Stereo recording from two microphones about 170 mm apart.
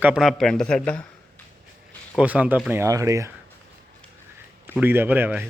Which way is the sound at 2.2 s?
5° right (ahead or behind).